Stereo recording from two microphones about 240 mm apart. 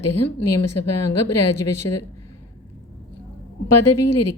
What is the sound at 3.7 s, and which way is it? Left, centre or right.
Speech, left.